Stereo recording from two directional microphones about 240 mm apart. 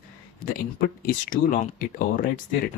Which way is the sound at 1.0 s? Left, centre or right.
Left.